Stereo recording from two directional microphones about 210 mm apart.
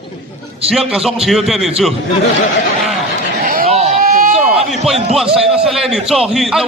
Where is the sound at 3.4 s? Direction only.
45° right (ahead or behind).